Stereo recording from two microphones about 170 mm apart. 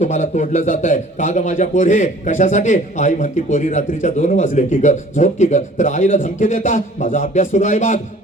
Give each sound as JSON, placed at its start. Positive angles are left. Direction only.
{"t": 0.0, "sound": "a man's voice", "side_deg": 45}